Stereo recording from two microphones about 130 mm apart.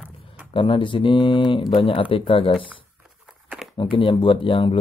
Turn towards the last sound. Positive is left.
turn(degrees=40)  # may be behind; listen again after turning